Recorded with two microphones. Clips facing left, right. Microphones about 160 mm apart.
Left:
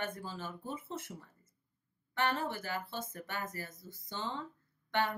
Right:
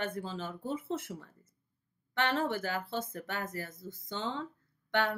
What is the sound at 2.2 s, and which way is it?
Speech, 90° right.